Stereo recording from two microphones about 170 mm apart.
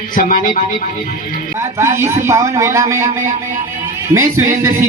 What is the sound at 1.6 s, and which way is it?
A man's voice, 15° right (ahead or behind).